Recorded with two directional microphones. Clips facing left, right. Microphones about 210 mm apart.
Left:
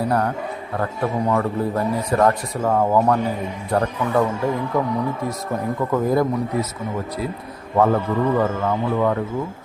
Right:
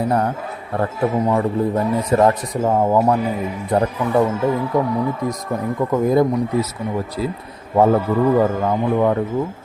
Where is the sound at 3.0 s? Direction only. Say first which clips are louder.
Right 2 dB; 5° right (ahead or behind).